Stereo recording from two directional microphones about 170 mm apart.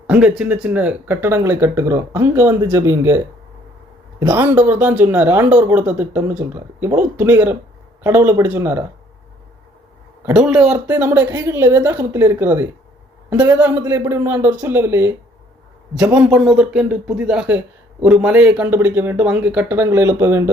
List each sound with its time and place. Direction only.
0.1 s speech: 5° right (ahead or behind)
4.2 s speech: 15° right (ahead or behind)
10.3 s speech: 5° right (ahead or behind)
16.1 s speech: 5° right (ahead or behind)